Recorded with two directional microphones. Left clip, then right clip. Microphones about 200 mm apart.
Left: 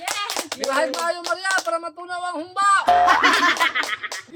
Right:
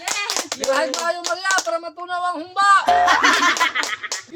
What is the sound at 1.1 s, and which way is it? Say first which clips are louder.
Speech: right 2 dB; 15° left (ahead or behind).